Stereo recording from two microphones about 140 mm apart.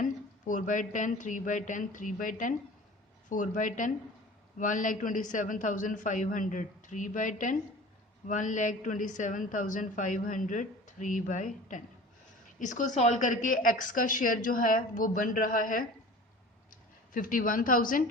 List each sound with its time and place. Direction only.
0.0 s a woman's voice: 65° left (ahead or behind)
17.2 s a woman's voice: 80° left